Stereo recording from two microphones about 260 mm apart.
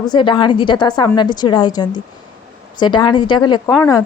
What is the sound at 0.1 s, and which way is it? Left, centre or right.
A woman's voice, centre.